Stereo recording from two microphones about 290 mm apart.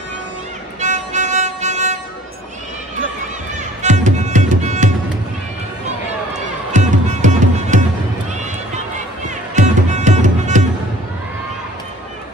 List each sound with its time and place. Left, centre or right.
0.7 s music: right
3.8 s music: right
6.7 s music: right
8.9 s music: right